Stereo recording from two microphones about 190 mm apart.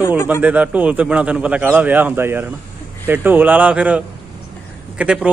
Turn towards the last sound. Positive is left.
turn(degrees=-5)  # may be behind; listen again after turning